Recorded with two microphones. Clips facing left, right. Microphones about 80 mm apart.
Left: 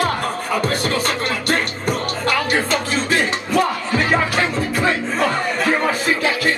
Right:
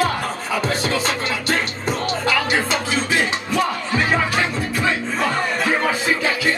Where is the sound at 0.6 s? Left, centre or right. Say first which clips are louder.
Right 1 dB; left.